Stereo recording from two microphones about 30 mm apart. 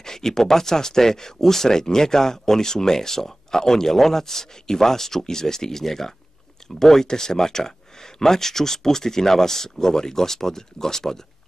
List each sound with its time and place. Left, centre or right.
0.0 s speech: centre